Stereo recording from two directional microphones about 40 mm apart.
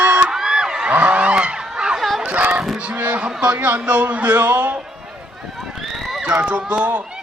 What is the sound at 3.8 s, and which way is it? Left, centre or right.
A man's voice, right.